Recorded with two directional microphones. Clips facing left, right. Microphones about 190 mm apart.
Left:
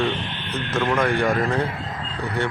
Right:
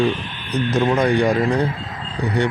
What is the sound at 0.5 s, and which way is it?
Speech, 15° right (ahead or behind).